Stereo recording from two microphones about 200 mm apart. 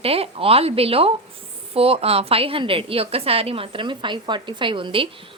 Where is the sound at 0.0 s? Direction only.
30° right (ahead or behind).